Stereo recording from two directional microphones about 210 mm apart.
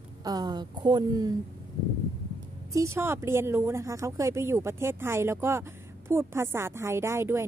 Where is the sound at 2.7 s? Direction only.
15° right (ahead or behind).